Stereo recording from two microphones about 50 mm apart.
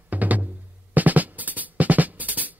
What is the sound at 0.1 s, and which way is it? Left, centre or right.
Music, right.